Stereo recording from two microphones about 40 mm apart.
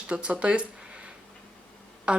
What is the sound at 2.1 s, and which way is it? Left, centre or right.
Speech, right.